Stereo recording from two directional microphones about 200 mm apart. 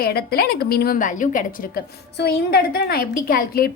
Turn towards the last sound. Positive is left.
turn(degrees=50)  # may be behind; listen again after turning